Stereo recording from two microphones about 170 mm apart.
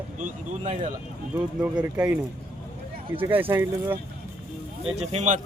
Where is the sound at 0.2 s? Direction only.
45° right (ahead or behind).